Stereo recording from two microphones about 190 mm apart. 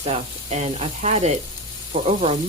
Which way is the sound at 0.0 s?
35° right (ahead or behind).